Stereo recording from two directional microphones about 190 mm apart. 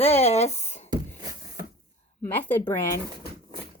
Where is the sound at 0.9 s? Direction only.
20° right (ahead or behind).